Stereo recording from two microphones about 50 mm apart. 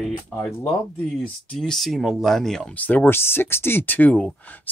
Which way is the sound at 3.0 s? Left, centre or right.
Left.